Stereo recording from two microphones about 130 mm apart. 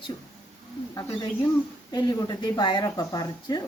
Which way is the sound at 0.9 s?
25° left (ahead or behind).